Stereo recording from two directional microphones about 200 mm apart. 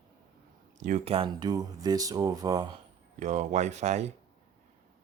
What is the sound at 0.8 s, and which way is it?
Speech, 35° right (ahead or behind).